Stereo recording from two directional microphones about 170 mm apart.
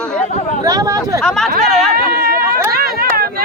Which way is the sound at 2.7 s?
60° right (ahead or behind).